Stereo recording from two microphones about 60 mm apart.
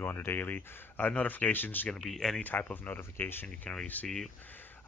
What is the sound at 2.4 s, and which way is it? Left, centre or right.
Speech, left.